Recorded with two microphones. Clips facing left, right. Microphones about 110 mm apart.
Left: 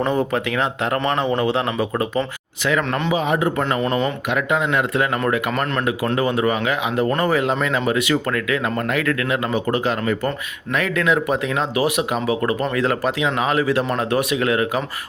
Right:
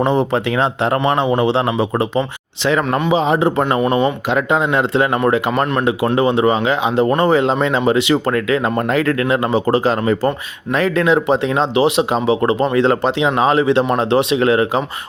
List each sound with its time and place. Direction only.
0.0 s speech: 25° right (ahead or behind)
3.8 s speech: 15° right (ahead or behind)
4.4 s speech: 30° right (ahead or behind)